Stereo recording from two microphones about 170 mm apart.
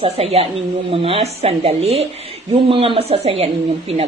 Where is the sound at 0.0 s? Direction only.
35° right (ahead or behind).